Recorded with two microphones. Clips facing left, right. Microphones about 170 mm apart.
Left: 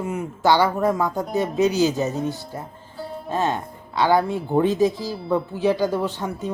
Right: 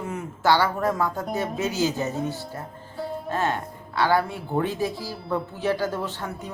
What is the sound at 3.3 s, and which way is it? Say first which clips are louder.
A woman's voice: left 4 dB; 20° left (ahead or behind).